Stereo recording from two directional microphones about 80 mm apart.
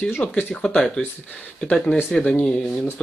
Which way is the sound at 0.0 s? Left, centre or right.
Centre.